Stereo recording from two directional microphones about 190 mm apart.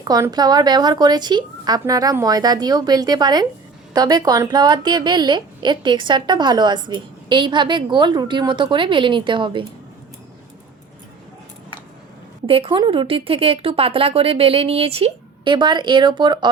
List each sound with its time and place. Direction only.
0.0 s a woman's voice: 20° right (ahead or behind)
12.5 s a woman's voice: 30° right (ahead or behind)